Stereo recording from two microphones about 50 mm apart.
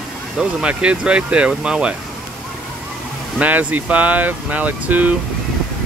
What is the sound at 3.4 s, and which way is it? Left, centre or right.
Speech, right.